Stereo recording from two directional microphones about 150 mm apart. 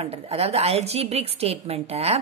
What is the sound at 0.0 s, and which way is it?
A woman's voice, 40° right (ahead or behind).